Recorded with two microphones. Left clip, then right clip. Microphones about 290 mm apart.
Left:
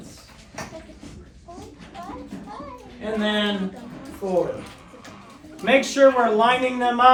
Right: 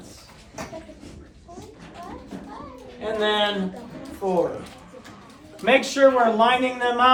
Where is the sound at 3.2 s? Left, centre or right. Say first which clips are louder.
Right 3 dB; centre.